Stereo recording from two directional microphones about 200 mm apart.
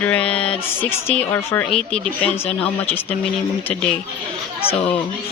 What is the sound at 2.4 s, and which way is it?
Speech, 30° left (ahead or behind).